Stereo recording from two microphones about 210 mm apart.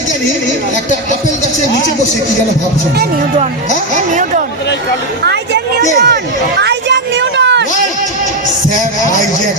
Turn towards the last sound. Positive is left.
turn(degrees=-55)  # may be behind; listen again after turning